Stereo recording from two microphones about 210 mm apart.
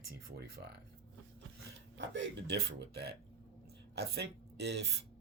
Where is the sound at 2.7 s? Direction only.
50° right (ahead or behind).